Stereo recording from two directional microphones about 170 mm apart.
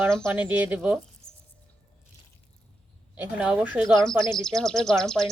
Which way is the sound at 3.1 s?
5° right (ahead or behind).